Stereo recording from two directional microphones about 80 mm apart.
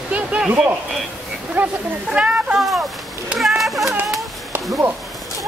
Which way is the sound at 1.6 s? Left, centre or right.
Right.